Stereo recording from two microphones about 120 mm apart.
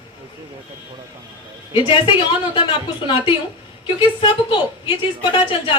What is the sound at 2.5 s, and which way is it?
A woman's voice, 45° left (ahead or behind).